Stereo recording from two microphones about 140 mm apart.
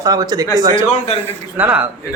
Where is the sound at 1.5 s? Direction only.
10° right (ahead or behind).